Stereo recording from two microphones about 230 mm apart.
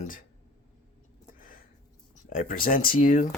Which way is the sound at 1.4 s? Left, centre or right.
Left.